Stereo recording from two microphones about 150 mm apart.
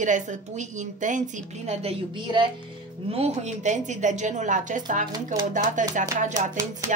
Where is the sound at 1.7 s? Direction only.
45° right (ahead or behind).